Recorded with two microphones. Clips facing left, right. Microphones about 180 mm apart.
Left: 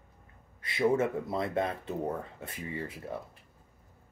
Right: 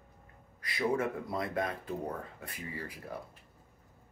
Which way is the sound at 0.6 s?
25° left (ahead or behind).